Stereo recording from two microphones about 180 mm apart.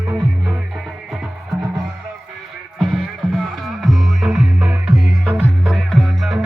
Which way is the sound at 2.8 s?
Centre (ahead or behind).